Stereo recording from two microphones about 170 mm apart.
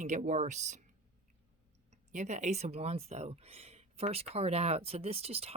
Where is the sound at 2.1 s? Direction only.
45° right (ahead or behind).